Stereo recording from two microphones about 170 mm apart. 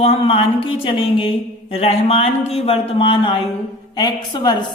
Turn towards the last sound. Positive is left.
turn(degrees=25)  # may be behind; listen again after turning